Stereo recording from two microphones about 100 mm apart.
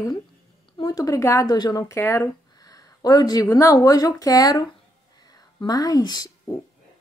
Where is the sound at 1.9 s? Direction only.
25° left (ahead or behind).